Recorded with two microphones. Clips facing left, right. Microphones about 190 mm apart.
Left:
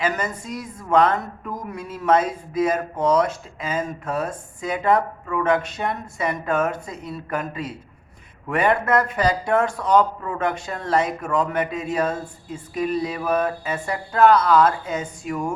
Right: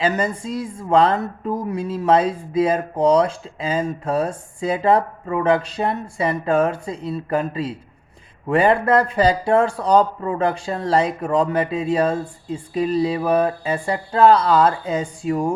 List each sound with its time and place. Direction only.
0.0 s a woman's voice: 30° right (ahead or behind)